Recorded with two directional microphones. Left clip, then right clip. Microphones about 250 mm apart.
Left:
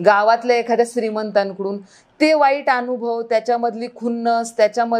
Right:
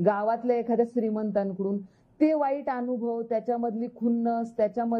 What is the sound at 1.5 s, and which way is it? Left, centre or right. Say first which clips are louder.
Speech: left 6 dB; left.